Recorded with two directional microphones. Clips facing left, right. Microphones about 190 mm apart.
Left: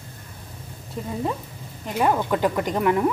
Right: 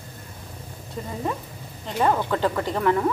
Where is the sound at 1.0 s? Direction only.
5° left (ahead or behind).